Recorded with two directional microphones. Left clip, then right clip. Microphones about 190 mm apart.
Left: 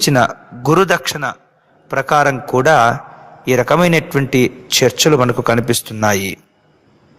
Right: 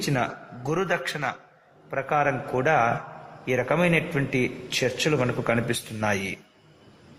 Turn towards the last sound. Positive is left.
turn(degrees=40)  # may be behind; listen again after turning